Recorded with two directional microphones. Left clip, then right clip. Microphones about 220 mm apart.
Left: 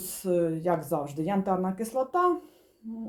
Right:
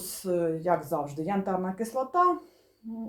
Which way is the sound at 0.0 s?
35° left (ahead or behind).